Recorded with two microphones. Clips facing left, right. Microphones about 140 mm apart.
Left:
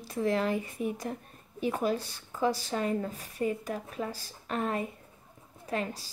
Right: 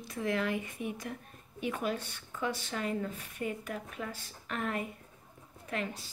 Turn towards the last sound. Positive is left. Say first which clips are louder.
# left 4 dB
turn(degrees=35)  # may be behind; listen again after turning